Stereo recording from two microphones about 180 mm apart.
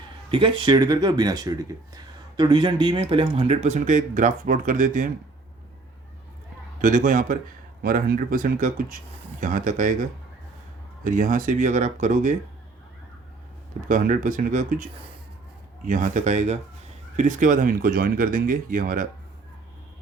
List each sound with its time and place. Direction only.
0.3 s speech: 30° right (ahead or behind); by 5.0 s 45° right (ahead or behind)
6.8 s speech: 50° right (ahead or behind)
13.8 s speech: 45° right (ahead or behind)
15.9 s speech: 45° right (ahead or behind)